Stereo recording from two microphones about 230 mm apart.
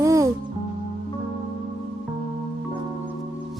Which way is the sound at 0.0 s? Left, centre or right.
Centre.